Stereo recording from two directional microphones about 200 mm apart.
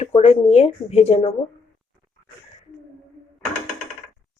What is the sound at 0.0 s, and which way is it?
Speech, 35° left (ahead or behind).